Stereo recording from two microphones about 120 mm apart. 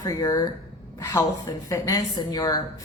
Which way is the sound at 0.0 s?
30° left (ahead or behind).